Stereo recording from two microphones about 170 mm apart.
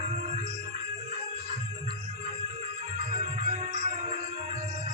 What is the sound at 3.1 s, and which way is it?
Music, 40° right (ahead or behind).